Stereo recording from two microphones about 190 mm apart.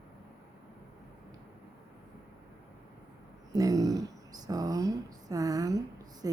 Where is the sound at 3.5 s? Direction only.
20° right (ahead or behind).